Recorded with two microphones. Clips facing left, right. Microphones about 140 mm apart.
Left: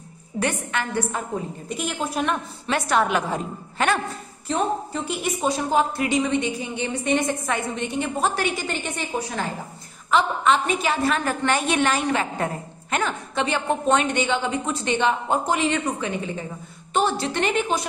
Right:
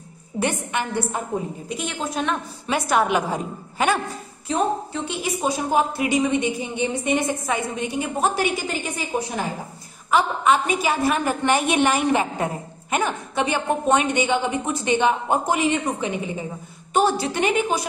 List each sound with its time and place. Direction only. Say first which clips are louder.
0.4 s a woman's voice: right 1 dB; 15° right (ahead or behind)
1.7 s a woman's voice: left 2 dB; centre (ahead or behind)
2.6 s a woman's voice: right 1 dB; 5° right (ahead or behind)
5.7 s a woman's voice: right 2 dB; 15° right (ahead or behind)
10.1 s a woman's voice: right 1 dB; 10° right (ahead or behind)